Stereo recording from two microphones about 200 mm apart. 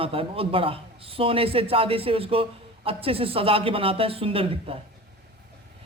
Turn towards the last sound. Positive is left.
turn(degrees=-30)  # may be behind; listen again after turning